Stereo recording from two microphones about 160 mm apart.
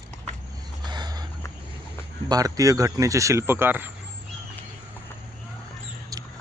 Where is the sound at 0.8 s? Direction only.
25° right (ahead or behind).